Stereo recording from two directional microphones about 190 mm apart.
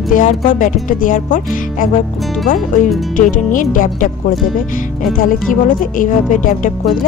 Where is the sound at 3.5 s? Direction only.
45° left (ahead or behind).